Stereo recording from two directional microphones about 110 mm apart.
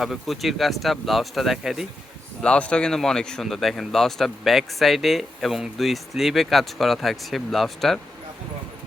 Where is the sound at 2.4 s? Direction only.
10° left (ahead or behind).